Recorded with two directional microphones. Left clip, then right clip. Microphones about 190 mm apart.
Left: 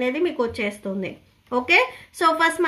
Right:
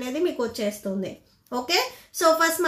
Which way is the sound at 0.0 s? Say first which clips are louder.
Left 4 dB; 40° left (ahead or behind).